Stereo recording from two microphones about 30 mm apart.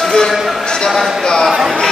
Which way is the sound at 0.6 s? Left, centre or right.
Left.